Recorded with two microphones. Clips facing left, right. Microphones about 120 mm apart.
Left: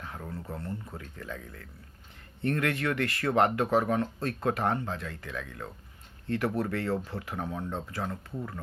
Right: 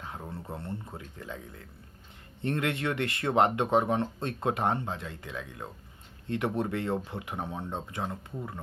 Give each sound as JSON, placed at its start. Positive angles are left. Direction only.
{"t": 0.0, "sound": "speech", "side_deg": -25}